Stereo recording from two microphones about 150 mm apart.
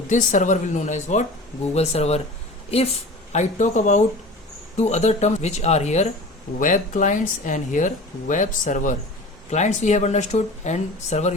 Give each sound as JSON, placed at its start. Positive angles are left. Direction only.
{"t": 0.1, "sound": "speech", "side_deg": 55}
{"t": 3.3, "sound": "speech", "side_deg": 55}
{"t": 6.6, "sound": "speech", "side_deg": 60}